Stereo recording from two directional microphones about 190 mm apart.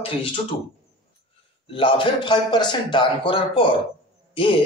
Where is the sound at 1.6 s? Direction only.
25° left (ahead or behind).